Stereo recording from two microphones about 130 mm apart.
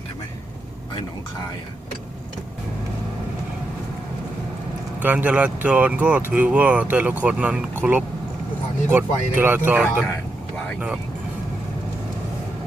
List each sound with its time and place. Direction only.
4.9 s speech: 10° right (ahead or behind)